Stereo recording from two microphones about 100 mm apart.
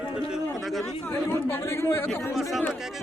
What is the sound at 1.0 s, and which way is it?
Chatter, 20° left (ahead or behind).